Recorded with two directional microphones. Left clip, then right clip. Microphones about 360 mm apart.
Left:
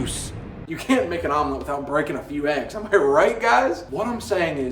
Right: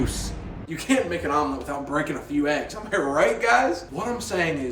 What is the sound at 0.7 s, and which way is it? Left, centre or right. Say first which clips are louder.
A man's voice: left 2 dB; centre.